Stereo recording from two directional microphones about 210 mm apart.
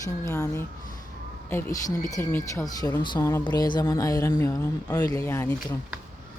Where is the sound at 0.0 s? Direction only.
15° left (ahead or behind).